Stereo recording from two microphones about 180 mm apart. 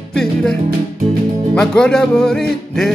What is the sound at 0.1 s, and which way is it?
Music, 5° left (ahead or behind).